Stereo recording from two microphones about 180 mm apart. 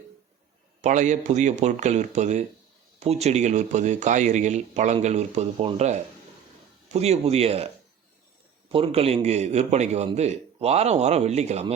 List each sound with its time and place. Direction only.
0.8 s speech: 40° right (ahead or behind)
8.7 s speech: 30° right (ahead or behind)